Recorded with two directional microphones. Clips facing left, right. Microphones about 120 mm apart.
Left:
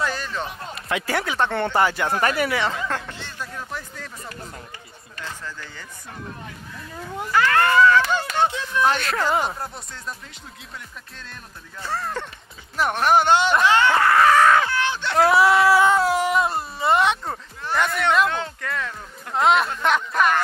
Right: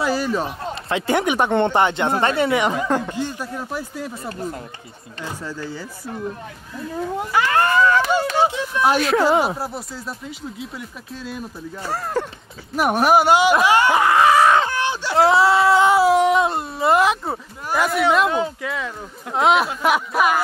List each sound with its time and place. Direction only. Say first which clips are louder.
0.0 s a sound: right 6 dB; 10° right (ahead or behind)
0.8 s speech: right 5 dB; 25° right (ahead or behind)
4.2 s speech: right 9 dB; 35° right (ahead or behind)
5.2 s speech: right 5 dB; 15° right (ahead or behind)
7.2 s speech: even; 15° right (ahead or behind)
11.8 s speech: right 4 dB; 35° right (ahead or behind)
12.7 s speech: right 3 dB; 10° right (ahead or behind)
14.6 s a sound: right 2 dB; 15° right (ahead or behind)
15.1 s speech: right 1 dB; 25° right (ahead or behind)
15.9 s speech: right 5 dB; centre (ahead or behind)